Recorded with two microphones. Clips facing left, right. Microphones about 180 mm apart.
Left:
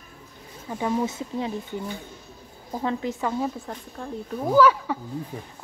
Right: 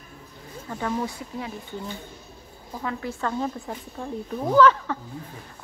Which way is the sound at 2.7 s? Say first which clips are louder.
Left 4 dB; 30° left (ahead or behind).